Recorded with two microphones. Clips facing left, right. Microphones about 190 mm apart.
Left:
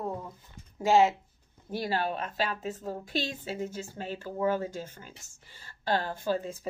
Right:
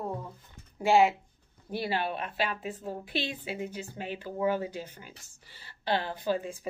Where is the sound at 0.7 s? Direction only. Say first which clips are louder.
Even; 15° right (ahead or behind).